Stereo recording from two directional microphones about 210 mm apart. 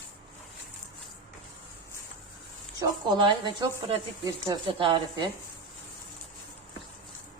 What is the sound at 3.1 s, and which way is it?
A woman's voice, 20° right (ahead or behind).